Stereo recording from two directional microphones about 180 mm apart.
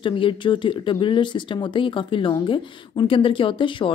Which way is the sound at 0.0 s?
30° left (ahead or behind).